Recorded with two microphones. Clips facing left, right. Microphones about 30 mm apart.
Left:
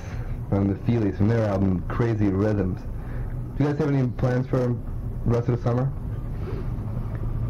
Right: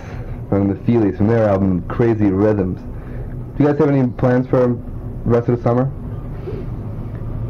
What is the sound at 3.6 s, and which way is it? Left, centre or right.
Speech, right.